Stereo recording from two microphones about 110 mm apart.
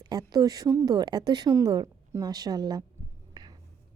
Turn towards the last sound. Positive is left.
turn(degrees=-40)  # may be behind; listen again after turning